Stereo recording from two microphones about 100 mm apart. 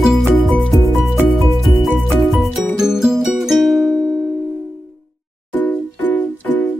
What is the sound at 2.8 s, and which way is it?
Music, 5° right (ahead or behind).